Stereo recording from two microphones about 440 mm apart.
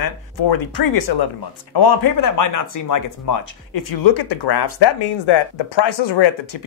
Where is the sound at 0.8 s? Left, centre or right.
Left.